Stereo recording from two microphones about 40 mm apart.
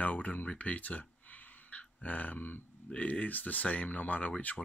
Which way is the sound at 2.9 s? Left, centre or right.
Left.